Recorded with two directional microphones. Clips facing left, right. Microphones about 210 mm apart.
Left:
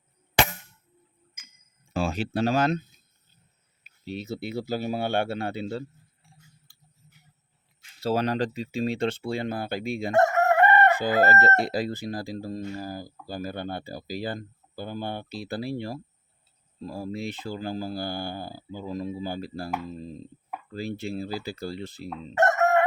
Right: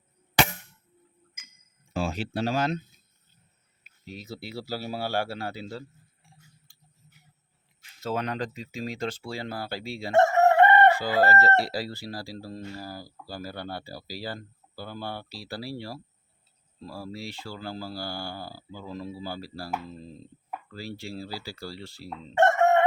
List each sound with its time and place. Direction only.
1.9 s speech: 60° left (ahead or behind)
4.1 s chicken: 25° left (ahead or behind)
8.0 s speech: 30° left (ahead or behind)
8.7 s chicken: 30° left (ahead or behind)
10.2 s chicken: 25° right (ahead or behind)
10.9 s chicken: 20° left (ahead or behind)
22.4 s chicken: 30° right (ahead or behind)